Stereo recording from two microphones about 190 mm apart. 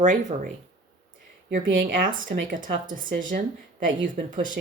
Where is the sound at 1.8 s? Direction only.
45° right (ahead or behind).